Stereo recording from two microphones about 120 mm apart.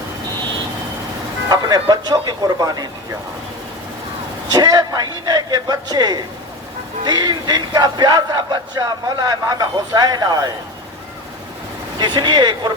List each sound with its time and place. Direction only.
1.5 s speech: 35° right (ahead or behind)
4.5 s speech: 35° right (ahead or behind)
11.9 s speech: 40° right (ahead or behind)